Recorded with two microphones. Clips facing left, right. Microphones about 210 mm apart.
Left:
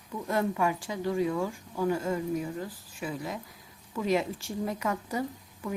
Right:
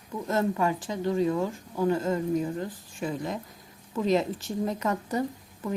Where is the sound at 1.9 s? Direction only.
10° left (ahead or behind).